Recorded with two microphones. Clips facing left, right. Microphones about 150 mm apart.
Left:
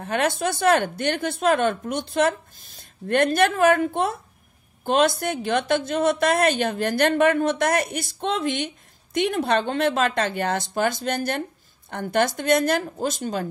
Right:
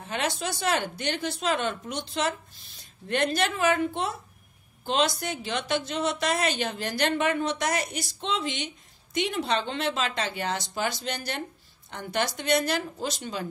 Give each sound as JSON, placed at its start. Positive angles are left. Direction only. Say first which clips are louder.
{"t": 0.0, "sound": "a woman's voice", "louder": "left 7 dB", "side_deg": 55}